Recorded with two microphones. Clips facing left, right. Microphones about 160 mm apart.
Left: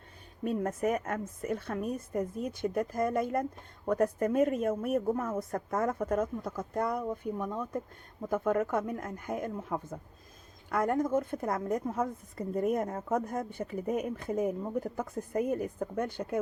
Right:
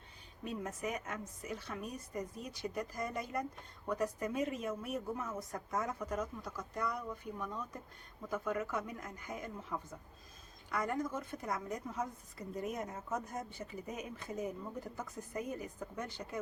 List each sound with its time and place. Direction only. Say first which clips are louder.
0.4 s a woman's voice: left 10 dB; 55° left (ahead or behind)